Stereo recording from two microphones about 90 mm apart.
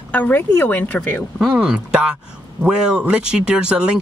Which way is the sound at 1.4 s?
10° right (ahead or behind).